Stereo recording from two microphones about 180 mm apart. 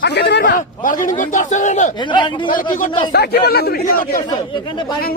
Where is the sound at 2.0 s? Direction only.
25° left (ahead or behind).